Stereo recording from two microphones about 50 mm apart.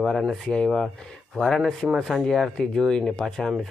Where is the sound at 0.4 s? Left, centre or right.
Centre.